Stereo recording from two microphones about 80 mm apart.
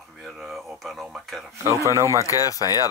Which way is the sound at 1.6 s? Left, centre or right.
Right.